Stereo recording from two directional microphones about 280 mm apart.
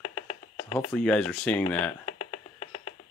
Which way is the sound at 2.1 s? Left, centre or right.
Left.